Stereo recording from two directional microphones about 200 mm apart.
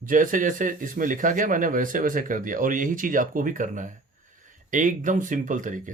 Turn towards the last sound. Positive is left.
turn(degrees=-40)  # may be behind; listen again after turning